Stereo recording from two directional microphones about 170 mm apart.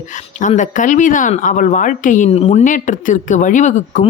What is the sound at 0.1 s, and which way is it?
Speech, 45° left (ahead or behind).